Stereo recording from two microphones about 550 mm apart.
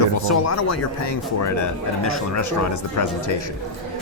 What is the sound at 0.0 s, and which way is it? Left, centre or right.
Speech, left.